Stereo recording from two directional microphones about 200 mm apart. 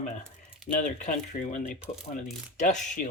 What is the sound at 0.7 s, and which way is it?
Speech, 40° left (ahead or behind).